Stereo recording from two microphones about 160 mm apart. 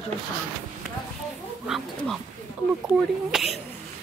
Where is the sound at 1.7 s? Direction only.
Centre (ahead or behind).